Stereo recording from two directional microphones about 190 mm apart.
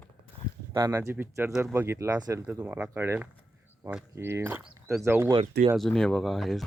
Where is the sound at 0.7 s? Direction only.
15° right (ahead or behind).